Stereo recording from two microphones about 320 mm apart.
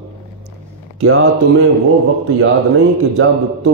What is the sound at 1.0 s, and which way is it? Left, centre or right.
Speech, right.